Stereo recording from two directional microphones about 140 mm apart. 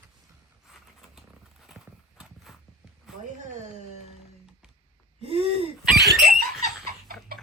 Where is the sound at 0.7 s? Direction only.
5° right (ahead or behind).